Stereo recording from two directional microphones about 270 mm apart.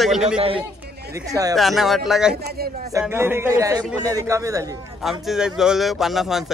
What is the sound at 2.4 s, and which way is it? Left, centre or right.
Speech, right.